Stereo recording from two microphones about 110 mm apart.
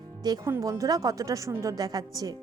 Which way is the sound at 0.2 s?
35° right (ahead or behind).